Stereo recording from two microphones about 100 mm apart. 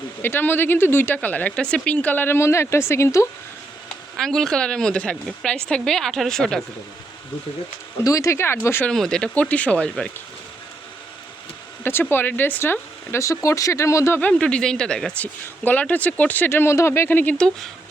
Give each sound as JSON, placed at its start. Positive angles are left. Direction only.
{"t": 0.2, "sound": "speech", "side_deg": 20}
{"t": 4.2, "sound": "a woman's voice", "side_deg": 5}
{"t": 8.0, "sound": "speech", "side_deg": 30}
{"t": 8.9, "sound": "speech", "side_deg": 5}
{"t": 11.8, "sound": "speech", "side_deg": 20}
{"t": 14.2, "sound": "speech", "side_deg": 10}
{"t": 17.3, "sound": "speech", "side_deg": 5}